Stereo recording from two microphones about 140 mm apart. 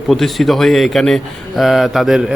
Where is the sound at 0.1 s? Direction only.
Centre (ahead or behind).